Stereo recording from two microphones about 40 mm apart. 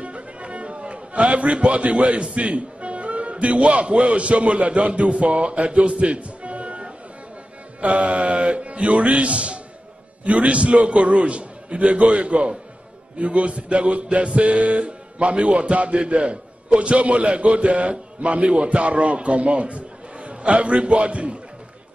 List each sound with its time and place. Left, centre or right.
0.0 s a man's voice: right
7.8 s music: right